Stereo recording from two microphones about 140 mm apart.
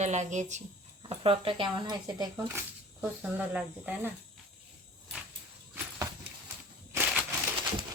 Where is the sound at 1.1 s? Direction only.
40° right (ahead or behind).